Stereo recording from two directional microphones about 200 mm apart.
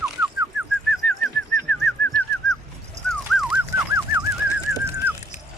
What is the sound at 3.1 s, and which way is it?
Bird, centre (ahead or behind).